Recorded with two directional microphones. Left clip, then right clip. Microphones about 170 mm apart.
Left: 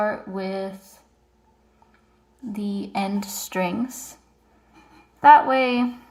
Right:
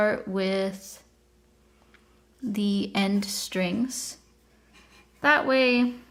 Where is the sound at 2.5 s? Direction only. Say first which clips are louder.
Even; 90° right.